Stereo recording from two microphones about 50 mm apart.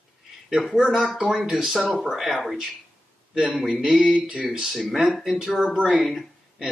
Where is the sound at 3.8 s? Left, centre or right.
Centre.